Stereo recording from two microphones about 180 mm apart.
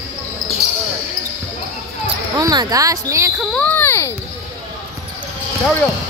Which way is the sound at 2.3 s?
20° right (ahead or behind).